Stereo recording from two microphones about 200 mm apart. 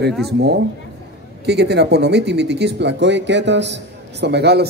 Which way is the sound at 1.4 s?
55° right (ahead or behind).